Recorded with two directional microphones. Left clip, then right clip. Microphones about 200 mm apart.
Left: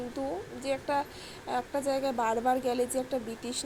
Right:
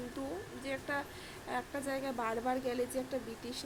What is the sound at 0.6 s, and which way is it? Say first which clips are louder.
A woman's voice: left 8 dB; 10° left (ahead or behind).